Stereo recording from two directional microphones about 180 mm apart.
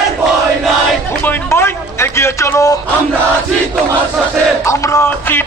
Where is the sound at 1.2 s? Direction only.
10° left (ahead or behind).